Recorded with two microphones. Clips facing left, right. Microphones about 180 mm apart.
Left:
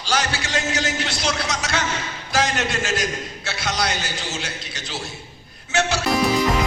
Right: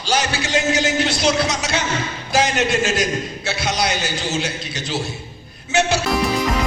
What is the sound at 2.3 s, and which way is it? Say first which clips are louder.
A man's voice: right 4 dB; 20° right (ahead or behind).